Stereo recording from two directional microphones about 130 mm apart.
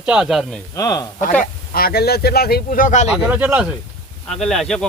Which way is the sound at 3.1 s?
10° right (ahead or behind).